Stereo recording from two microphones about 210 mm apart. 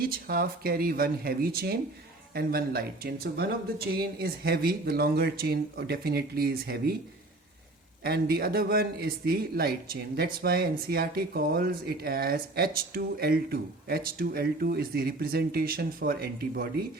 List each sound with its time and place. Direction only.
0.0 s speech: 45° right (ahead or behind)
8.0 s speech: 45° right (ahead or behind)